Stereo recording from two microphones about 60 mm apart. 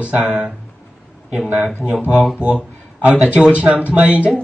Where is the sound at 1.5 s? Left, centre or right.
Centre.